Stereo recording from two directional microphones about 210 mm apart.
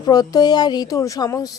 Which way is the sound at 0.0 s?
20° left (ahead or behind).